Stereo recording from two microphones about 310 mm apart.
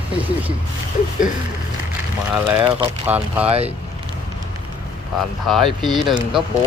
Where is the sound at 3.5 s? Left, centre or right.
Centre.